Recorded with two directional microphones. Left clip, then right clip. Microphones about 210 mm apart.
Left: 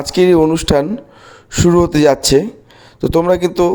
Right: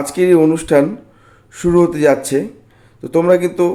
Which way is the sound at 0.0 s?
40° left (ahead or behind).